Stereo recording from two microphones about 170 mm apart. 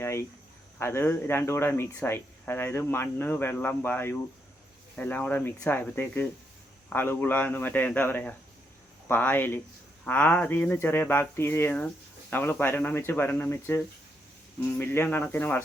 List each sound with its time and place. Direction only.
0.0 s cricket: 15° left (ahead or behind)
0.8 s speech: 15° left (ahead or behind)